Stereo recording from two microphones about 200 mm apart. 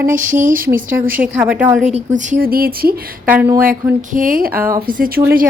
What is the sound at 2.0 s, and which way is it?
Speech, 40° right (ahead or behind).